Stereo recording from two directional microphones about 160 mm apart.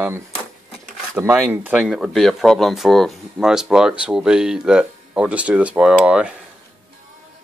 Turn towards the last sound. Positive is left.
turn(degrees=-5)  # may be behind; listen again after turning